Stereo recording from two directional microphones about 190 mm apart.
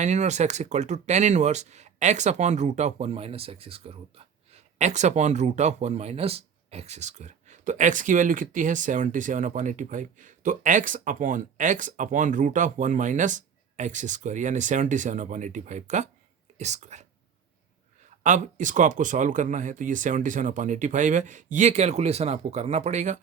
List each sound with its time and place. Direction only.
0.0 s speech: 40° right (ahead or behind)
18.2 s speech: 40° right (ahead or behind)